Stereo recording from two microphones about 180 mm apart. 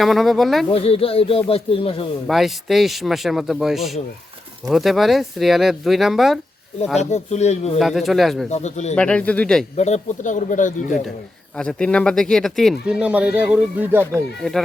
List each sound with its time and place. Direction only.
0.0 s speech: centre (ahead or behind)
0.7 s speech: 30° left (ahead or behind)
2.2 s speech: centre (ahead or behind)
7.0 s speech: 40° left (ahead or behind)
7.8 s speech: centre (ahead or behind)
8.4 s speech: 40° left (ahead or behind)
9.0 s speech: 5° left (ahead or behind)
9.7 s speech: 40° left (ahead or behind)
11.5 s speech: 5° left (ahead or behind)